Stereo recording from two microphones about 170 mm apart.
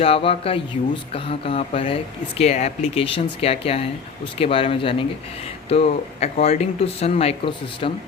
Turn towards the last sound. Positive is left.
turn(degrees=30)  # may be behind; listen again after turning